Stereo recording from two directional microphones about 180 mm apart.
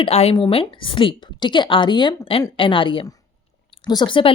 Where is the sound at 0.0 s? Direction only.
35° left (ahead or behind).